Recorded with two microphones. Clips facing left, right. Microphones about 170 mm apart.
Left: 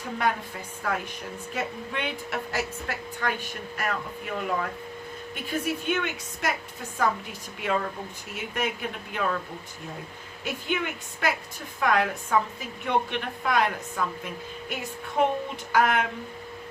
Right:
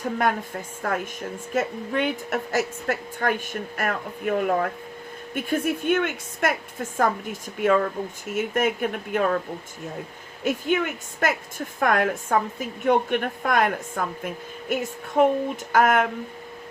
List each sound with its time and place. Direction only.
0.0 s a woman's voice: 50° right (ahead or behind)
10.4 s a woman's voice: 45° right (ahead or behind)